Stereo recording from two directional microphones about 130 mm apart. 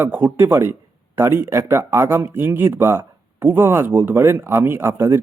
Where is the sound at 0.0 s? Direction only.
15° right (ahead or behind).